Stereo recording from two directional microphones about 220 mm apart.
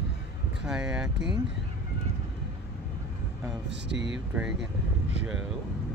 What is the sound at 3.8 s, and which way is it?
Speech, 55° right (ahead or behind).